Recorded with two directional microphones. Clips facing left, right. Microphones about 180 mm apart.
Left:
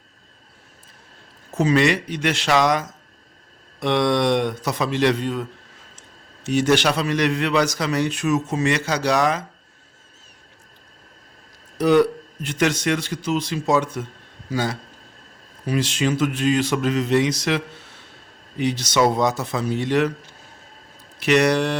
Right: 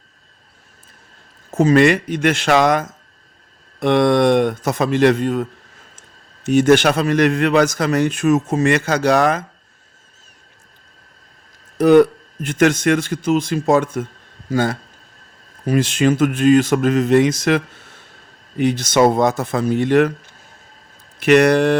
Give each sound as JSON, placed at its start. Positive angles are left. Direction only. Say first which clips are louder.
{"t": 1.5, "sound": "a man's voice", "louder": "right 5 dB", "side_deg": -50}
{"t": 11.8, "sound": "a man's voice", "louder": "right 6 dB", "side_deg": -50}
{"t": 21.2, "sound": "a man's voice", "louder": "right 5 dB", "side_deg": -55}